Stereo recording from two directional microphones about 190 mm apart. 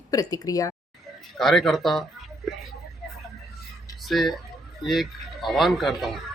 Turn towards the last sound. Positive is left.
turn(degrees=0)  # may be behind; listen again after turning